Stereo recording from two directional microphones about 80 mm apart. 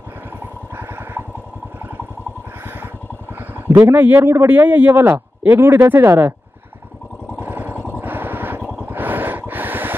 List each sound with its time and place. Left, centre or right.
0.7 s vehicle: right
3.3 s a man's voice: right
7.3 s vehicle: right
8.8 s a sound: right